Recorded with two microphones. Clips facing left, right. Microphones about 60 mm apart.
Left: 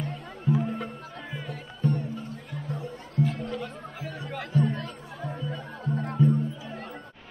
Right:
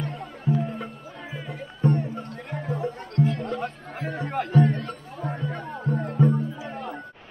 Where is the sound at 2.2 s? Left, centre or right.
Right.